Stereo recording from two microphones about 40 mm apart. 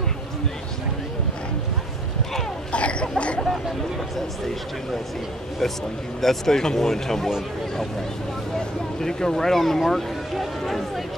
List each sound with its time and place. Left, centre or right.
2.7 s cough: left
5.6 s speech: centre
8.5 s speech: centre